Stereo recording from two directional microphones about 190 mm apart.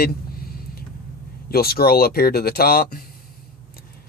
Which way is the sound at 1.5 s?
55° left (ahead or behind).